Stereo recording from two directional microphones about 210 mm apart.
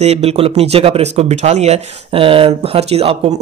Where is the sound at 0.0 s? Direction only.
30° right (ahead or behind).